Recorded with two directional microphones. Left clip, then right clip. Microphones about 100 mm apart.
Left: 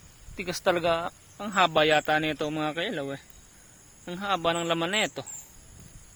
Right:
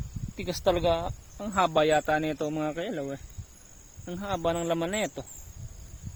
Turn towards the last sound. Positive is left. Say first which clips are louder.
# left 3 dB
turn(degrees=-25)  # may be behind; listen again after turning